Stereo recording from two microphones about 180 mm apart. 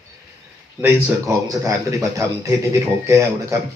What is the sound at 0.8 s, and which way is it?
A man's voice, 15° right (ahead or behind).